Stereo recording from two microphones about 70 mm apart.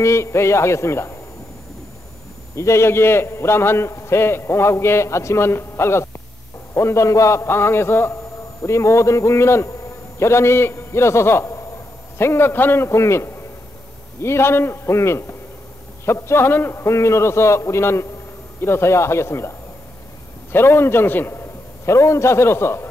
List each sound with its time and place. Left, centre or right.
0.0 s a man's voice: left
2.5 s a man's voice: left
20.5 s a man's voice: left